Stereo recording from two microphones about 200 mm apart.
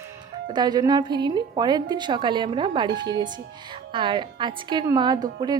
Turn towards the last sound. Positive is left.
turn(degrees=-20)  # may be behind; listen again after turning